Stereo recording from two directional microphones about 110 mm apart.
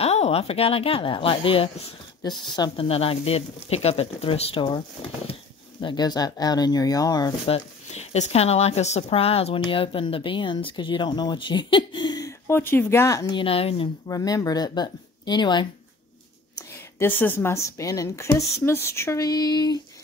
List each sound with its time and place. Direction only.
0.0 s a woman's voice: 70° left (ahead or behind)
2.2 s speech: 40° left (ahead or behind)
7.4 s speech: 75° left (ahead or behind); by 12.3 s 40° left (ahead or behind)
12.3 s speech: 25° left (ahead or behind)
13.3 s speech: 55° left (ahead or behind)
14.0 s speech: 35° left (ahead or behind)
17.0 s a woman's voice: 20° left (ahead or behind)
19.2 s speech: 35° left (ahead or behind)